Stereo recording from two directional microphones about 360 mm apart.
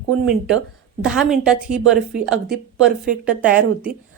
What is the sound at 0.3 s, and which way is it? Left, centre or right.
A woman's voice, centre.